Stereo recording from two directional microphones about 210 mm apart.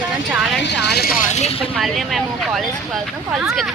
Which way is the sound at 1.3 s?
30° left (ahead or behind).